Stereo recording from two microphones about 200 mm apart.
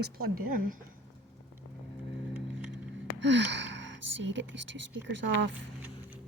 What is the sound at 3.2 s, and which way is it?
Speech, 60° right (ahead or behind).